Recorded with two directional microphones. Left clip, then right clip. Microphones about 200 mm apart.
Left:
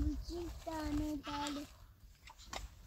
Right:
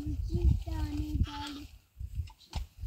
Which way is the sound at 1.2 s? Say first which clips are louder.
Right 1 dB; 55° left (ahead or behind).